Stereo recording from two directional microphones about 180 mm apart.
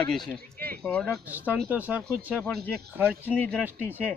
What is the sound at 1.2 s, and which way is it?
Speech, 10° right (ahead or behind).